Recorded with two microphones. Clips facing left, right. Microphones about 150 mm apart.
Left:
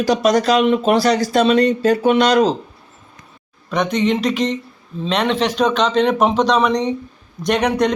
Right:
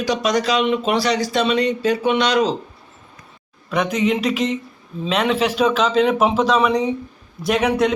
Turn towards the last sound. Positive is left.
turn(degrees=-5)  # may be behind; listen again after turning